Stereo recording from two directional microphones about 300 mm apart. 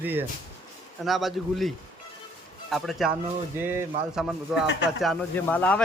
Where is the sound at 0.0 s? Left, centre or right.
Centre.